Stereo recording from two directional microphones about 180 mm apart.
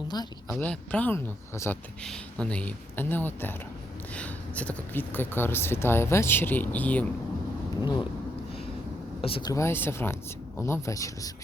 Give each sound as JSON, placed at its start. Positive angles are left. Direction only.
{"t": 0.1, "sound": "speech", "side_deg": 20}
{"t": 0.5, "sound": "speech", "side_deg": 5}
{"t": 9.2, "sound": "speech", "side_deg": 30}
{"t": 9.5, "sound": "speech", "side_deg": 15}